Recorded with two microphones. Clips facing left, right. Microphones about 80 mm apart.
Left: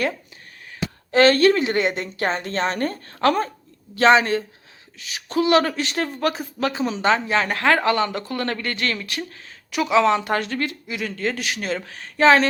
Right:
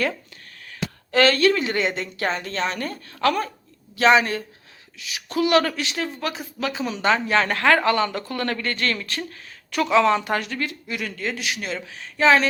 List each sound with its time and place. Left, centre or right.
0.7 s a sound: left
1.6 s a woman's voice: left
10.3 s a woman's voice: left